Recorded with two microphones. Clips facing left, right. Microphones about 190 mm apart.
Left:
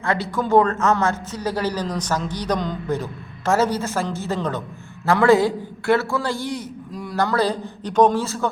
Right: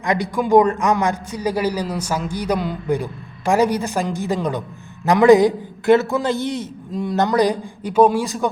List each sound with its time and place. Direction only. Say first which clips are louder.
0.0 s a man's voice: right 3 dB; 15° right (ahead or behind)